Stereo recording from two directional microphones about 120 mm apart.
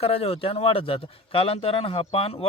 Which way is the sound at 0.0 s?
55° left (ahead or behind).